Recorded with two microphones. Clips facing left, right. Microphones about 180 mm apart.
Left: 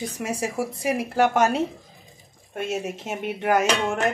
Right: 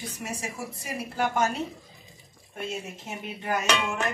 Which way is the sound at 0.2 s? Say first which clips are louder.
Left 9 dB; 90° left.